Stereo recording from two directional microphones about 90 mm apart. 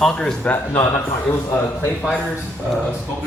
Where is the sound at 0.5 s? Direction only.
30° left (ahead or behind).